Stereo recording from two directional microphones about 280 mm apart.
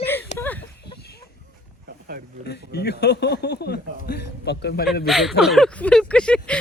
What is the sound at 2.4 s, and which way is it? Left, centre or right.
Speech, left.